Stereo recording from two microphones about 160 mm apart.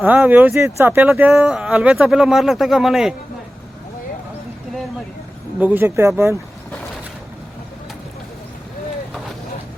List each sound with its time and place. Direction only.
0.0 s speech: 10° right (ahead or behind)
5.5 s speech: 10° right (ahead or behind)